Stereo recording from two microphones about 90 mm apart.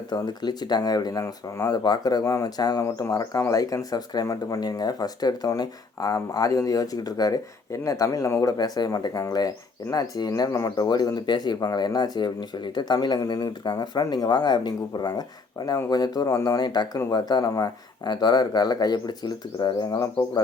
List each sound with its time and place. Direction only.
0.1 s speech: 50° left (ahead or behind)
2.2 s speech: 35° left (ahead or behind)
2.8 s speech: 30° left (ahead or behind)
16.6 s speech: 55° left (ahead or behind)